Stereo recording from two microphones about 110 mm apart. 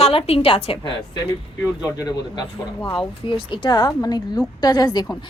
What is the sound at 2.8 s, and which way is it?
Speech, 45° left (ahead or behind).